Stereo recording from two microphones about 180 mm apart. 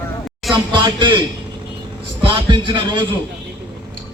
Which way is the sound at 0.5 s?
25° right (ahead or behind).